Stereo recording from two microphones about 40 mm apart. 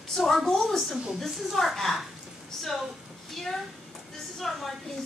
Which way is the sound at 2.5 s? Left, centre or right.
Centre.